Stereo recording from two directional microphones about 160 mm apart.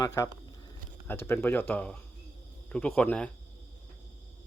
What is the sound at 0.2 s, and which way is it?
Speech, 20° left (ahead or behind).